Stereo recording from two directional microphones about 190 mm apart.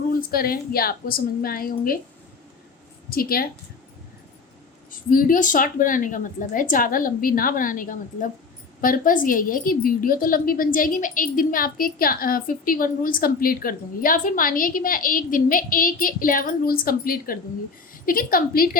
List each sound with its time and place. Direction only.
0.1 s a woman's voice: 50° left (ahead or behind)
3.1 s a woman's voice: 50° left (ahead or behind)
4.9 s a woman's voice: 45° left (ahead or behind)